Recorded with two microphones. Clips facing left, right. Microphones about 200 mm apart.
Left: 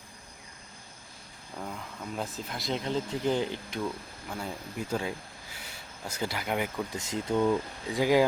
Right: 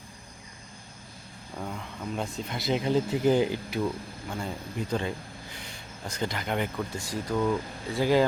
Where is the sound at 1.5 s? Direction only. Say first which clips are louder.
Right 2 dB; centre (ahead or behind).